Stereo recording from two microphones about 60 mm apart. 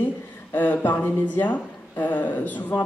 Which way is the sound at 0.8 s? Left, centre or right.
Left.